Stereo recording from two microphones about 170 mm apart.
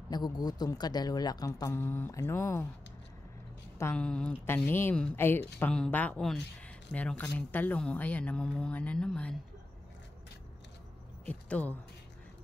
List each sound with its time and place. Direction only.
0.1 s speech: 25° left (ahead or behind)
3.7 s speech: 10° left (ahead or behind)
11.2 s speech: 10° left (ahead or behind)